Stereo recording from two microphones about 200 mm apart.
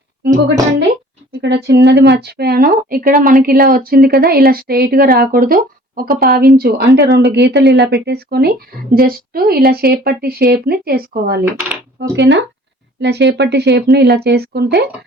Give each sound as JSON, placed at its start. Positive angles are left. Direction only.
{"t": 1.4, "sound": "speech", "side_deg": -60}
{"t": 11.9, "sound": "speech", "side_deg": -60}